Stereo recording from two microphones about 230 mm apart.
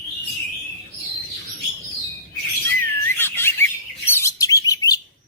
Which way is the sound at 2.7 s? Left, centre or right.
Centre.